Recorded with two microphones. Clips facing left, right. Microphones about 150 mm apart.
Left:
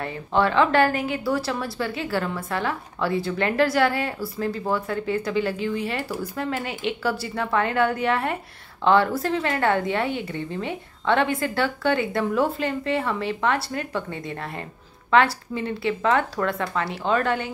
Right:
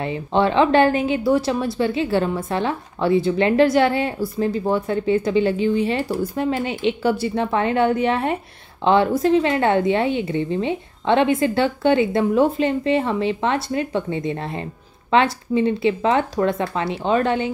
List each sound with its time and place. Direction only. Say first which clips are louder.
0.0 s a woman's voice: right 3 dB; 20° right (ahead or behind)